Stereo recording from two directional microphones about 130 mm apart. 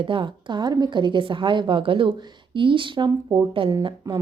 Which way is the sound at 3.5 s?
40° right (ahead or behind).